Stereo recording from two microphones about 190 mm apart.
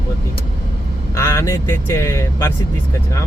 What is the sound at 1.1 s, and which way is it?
Speech, 15° left (ahead or behind).